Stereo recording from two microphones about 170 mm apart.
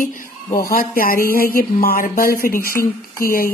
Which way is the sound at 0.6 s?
55° left (ahead or behind).